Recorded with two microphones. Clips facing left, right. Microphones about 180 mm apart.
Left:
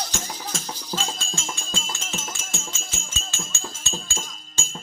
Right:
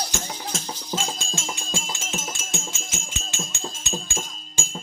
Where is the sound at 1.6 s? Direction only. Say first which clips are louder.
Right 2 dB; 15° right (ahead or behind).